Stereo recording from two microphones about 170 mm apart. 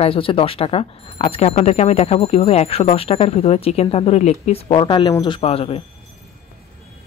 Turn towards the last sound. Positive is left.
turn(degrees=35)  # may be behind; listen again after turning